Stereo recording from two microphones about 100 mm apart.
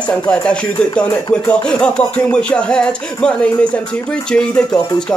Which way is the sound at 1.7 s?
10° left (ahead or behind).